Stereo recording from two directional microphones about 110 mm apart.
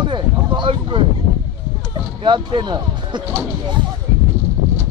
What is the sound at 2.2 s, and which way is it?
Speech, 45° right (ahead or behind).